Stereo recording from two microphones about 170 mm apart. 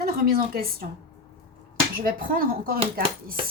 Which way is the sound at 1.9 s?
60° right (ahead or behind).